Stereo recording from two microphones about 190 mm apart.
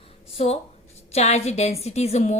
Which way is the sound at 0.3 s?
35° left (ahead or behind).